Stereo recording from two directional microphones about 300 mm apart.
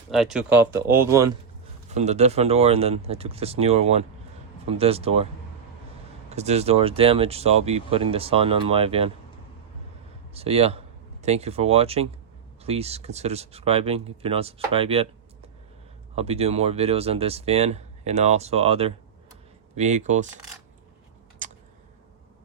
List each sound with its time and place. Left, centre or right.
0.1 s speech: centre
1.9 s speech: right
10.3 s speech: centre
21.4 s a sound: right